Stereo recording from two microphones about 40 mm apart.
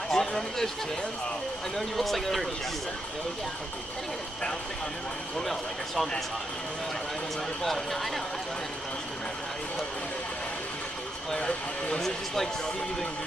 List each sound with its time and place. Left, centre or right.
0.1 s a sound: centre
1.8 s a man's voice: centre
5.4 s a man's voice: centre
7.6 s speech: centre
11.3 s speech: left